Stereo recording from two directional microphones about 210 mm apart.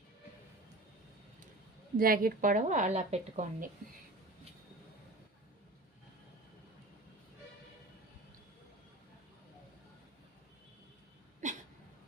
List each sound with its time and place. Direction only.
2.0 s a woman's voice: 45° right (ahead or behind)
11.4 s dog: 35° right (ahead or behind)